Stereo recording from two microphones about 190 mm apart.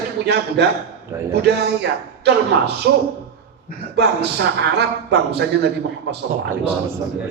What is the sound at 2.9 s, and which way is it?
A man's voice, 65° right (ahead or behind).